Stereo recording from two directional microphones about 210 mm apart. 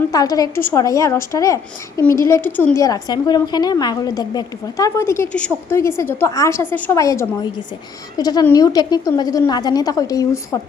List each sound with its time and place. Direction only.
0.1 s a woman's voice: 15° left (ahead or behind)